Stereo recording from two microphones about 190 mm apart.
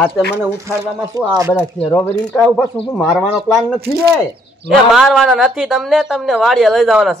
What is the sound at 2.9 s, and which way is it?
Speech, 10° left (ahead or behind).